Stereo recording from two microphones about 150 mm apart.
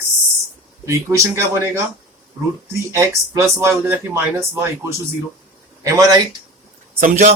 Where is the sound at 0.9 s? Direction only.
20° right (ahead or behind).